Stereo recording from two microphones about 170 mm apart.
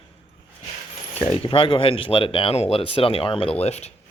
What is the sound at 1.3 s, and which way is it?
Speech, 30° left (ahead or behind).